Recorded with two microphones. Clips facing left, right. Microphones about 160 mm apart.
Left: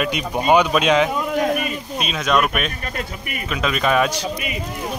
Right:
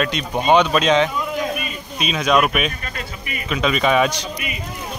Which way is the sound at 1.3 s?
55° left (ahead or behind).